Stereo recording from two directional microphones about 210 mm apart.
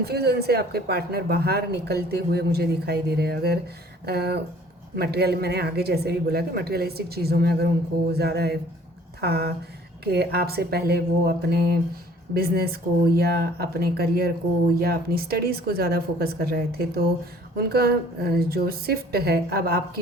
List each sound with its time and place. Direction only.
0.0 s speech: 50° right (ahead or behind)